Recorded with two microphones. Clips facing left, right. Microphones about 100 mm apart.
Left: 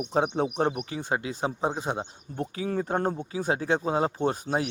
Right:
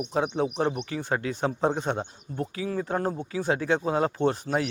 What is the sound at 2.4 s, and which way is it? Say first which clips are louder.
Speech: left 1 dB; 35° left (ahead or behind).